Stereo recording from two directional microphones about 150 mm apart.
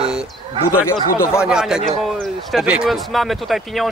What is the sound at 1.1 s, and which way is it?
Speech, 20° left (ahead or behind).